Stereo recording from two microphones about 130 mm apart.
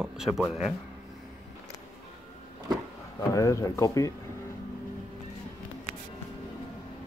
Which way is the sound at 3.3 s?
25° left (ahead or behind).